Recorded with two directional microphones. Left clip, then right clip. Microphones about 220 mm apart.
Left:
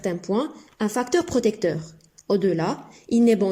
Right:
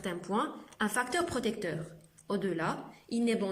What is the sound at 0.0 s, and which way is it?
A woman's voice, 20° left (ahead or behind).